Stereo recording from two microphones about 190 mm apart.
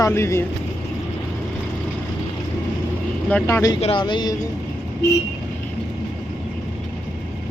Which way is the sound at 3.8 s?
25° left (ahead or behind).